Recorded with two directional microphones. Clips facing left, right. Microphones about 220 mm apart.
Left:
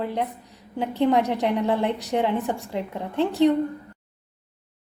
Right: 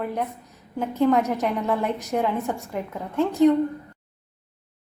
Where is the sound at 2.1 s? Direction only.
20° left (ahead or behind).